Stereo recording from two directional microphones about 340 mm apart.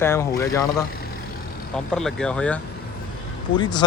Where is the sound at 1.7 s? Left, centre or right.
Centre.